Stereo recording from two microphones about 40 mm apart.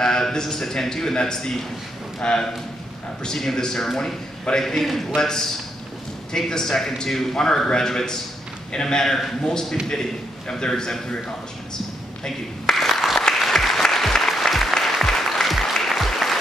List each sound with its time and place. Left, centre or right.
0.0 s a man's voice: centre
10.8 s a man's voice: centre
12.6 s applause: centre